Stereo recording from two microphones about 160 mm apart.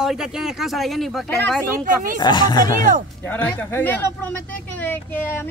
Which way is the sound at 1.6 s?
60° right (ahead or behind).